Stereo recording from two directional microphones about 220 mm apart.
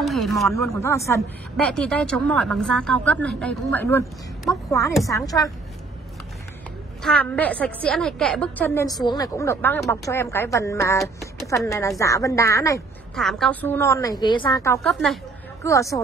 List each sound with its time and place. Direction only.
0.0 s a sound: centre (ahead or behind)
0.6 s a woman's voice: 10° left (ahead or behind)
7.0 s a woman's voice: 5° left (ahead or behind)
13.1 s a woman's voice: centre (ahead or behind)
14.9 s speech: centre (ahead or behind)
15.6 s a woman's voice: 15° left (ahead or behind)